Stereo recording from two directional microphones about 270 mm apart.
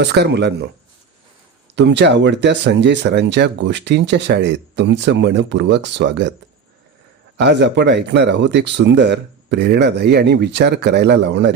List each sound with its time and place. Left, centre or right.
0.0 s speech: right
1.7 s speech: right
7.3 s speech: right